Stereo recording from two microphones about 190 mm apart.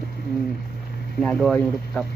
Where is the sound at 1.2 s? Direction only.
5° left (ahead or behind).